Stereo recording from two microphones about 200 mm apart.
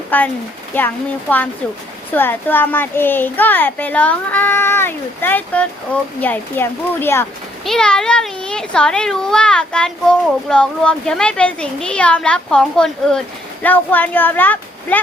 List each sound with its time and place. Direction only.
0.1 s a child's voice: 10° left (ahead or behind)
2.1 s a child's voice: 10° left (ahead or behind)